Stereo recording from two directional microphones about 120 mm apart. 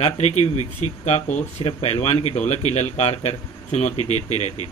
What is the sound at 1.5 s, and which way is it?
A man's voice, 55° left (ahead or behind).